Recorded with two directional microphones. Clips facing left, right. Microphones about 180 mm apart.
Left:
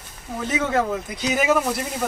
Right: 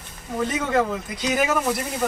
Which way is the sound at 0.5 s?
5° left (ahead or behind).